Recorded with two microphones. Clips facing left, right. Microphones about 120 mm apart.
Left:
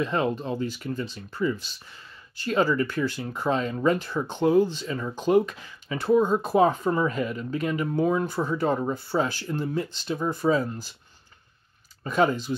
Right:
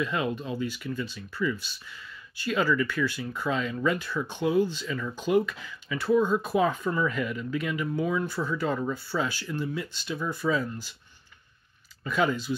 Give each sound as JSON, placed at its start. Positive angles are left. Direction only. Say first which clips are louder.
{"t": 0.0, "sound": "speech", "louder": "left 3 dB", "side_deg": 40}
{"t": 12.0, "sound": "speech", "louder": "left 3 dB", "side_deg": 40}